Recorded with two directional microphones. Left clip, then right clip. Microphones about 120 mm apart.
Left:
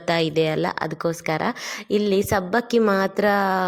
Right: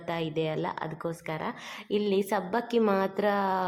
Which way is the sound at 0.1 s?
30° left (ahead or behind).